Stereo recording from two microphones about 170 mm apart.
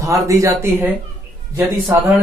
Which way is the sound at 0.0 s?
20° right (ahead or behind).